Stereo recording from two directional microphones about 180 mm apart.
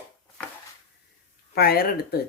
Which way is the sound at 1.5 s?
60° left (ahead or behind).